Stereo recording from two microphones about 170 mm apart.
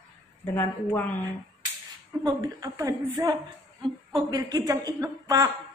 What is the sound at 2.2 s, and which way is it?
A woman's voice, 20° right (ahead or behind).